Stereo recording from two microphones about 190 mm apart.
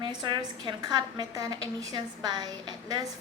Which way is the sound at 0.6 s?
20° right (ahead or behind).